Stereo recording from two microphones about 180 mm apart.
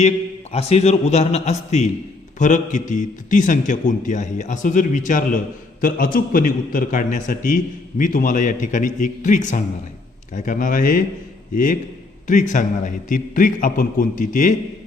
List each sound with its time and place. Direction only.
0.5 s a man's voice: 35° left (ahead or behind)